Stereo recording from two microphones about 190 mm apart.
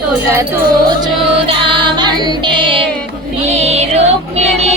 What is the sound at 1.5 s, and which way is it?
Music, 25° right (ahead or behind).